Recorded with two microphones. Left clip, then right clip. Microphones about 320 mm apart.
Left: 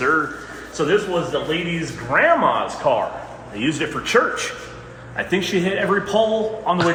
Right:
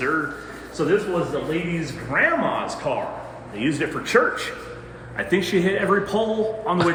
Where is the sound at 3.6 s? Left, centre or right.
Left.